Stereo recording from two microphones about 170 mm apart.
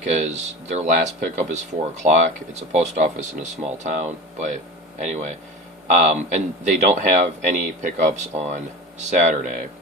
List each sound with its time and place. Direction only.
0.1 s speech: 40° right (ahead or behind)